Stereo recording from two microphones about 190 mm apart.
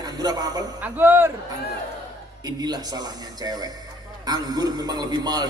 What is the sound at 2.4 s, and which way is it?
A man's voice, 20° right (ahead or behind).